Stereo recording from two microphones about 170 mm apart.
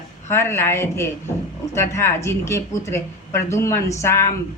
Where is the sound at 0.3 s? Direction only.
15° left (ahead or behind).